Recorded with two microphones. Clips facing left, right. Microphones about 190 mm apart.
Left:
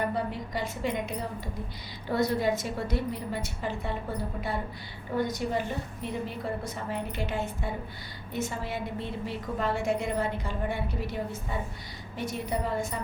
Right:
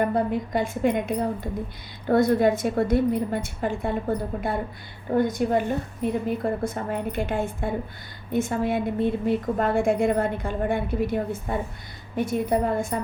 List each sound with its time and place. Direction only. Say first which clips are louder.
0.1 s a woman's voice: right 8 dB; 50° right (ahead or behind)
5.1 s a woman's voice: right 7 dB; 50° right (ahead or behind)